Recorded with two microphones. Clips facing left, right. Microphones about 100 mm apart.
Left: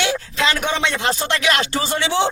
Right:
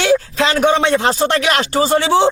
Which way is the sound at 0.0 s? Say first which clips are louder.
Right 6 dB; 40° right (ahead or behind).